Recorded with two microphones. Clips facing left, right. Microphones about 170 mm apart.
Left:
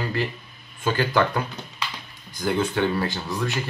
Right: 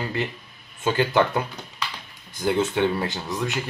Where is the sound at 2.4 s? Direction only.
20° right (ahead or behind).